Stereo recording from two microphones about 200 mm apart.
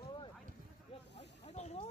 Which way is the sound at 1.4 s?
35° left (ahead or behind).